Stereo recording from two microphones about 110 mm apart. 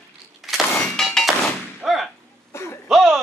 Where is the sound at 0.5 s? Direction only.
5° left (ahead or behind).